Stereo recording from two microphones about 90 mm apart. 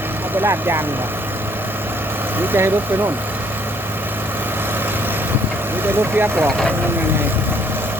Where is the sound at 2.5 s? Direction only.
25° right (ahead or behind).